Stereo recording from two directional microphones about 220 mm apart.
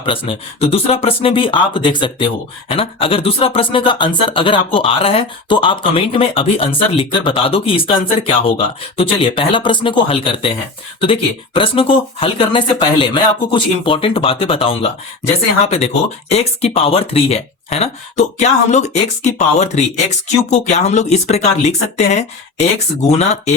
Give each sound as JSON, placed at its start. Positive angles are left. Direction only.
{"t": 0.0, "sound": "speech", "side_deg": 25}